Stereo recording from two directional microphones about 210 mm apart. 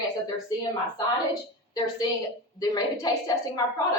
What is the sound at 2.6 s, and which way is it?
Speech, 20° left (ahead or behind).